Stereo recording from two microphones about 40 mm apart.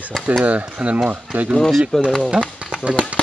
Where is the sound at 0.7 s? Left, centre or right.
Right.